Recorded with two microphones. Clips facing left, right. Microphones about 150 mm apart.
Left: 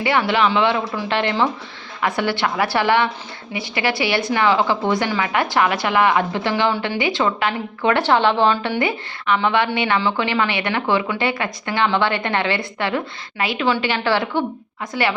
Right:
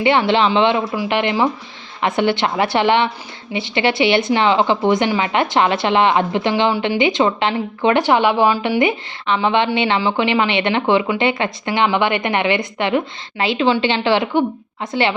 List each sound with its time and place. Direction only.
0.0 s a woman's voice: 20° right (ahead or behind)